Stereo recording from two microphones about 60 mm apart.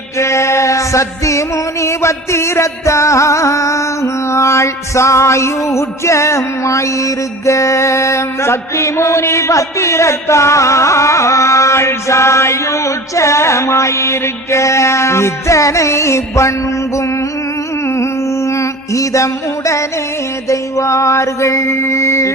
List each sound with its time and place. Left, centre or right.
0.2 s music: left
17.8 s music: left